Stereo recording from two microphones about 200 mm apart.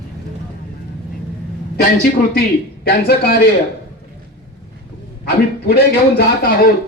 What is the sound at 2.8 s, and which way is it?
Speech, 50° left (ahead or behind).